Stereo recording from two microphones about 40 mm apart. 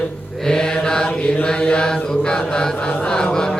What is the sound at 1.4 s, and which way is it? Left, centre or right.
Chant, left.